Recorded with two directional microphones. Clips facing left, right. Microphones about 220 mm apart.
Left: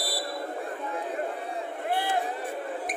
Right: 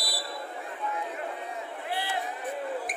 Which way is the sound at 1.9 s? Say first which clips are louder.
Left 5 dB; 50° left (ahead or behind).